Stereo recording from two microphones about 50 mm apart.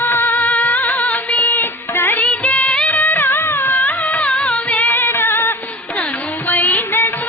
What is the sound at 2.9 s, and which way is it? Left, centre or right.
Music, left.